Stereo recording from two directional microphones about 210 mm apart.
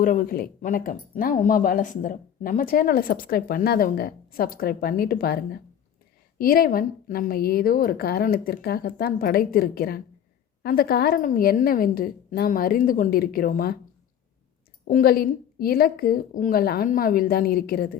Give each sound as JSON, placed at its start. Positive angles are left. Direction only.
{"t": 0.0, "sound": "speech", "side_deg": 40}
{"t": 14.8, "sound": "speech", "side_deg": 45}